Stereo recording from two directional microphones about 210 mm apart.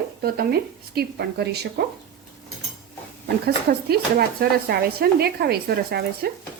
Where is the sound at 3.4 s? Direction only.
45° right (ahead or behind).